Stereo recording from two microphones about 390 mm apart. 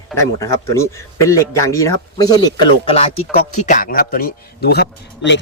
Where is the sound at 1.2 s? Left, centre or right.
Centre.